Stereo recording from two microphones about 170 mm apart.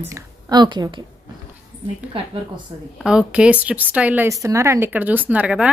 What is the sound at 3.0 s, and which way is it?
Speech, 5° right (ahead or behind).